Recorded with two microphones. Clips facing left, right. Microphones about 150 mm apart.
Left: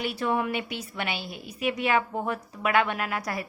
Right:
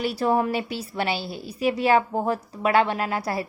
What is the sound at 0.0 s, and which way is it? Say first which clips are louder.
A woman's voice: right 5 dB; 35° right (ahead or behind).